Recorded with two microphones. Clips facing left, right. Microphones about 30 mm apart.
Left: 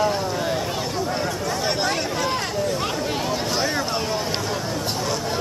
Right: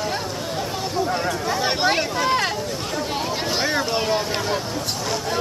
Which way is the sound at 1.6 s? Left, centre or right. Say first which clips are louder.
Right 3 dB; right.